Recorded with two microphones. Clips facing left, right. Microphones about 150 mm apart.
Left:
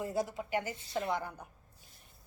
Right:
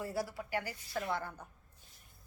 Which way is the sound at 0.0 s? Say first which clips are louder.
Left 3 dB; 20° left (ahead or behind).